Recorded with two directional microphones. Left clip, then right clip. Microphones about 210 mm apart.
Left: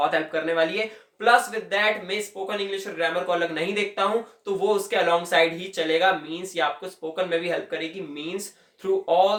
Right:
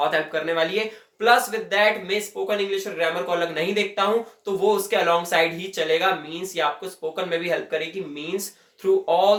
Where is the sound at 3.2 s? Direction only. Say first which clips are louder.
Right 1 dB; centre (ahead or behind).